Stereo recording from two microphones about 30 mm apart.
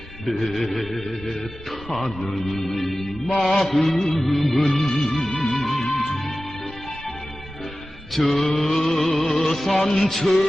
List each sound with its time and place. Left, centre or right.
0.3 s speech: centre
5.1 s music: centre
8.1 s mantra: centre
9.1 s music: centre
9.6 s speech: centre